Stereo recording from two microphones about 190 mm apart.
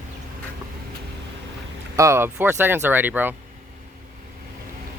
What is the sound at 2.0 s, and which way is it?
Speech, 15° right (ahead or behind).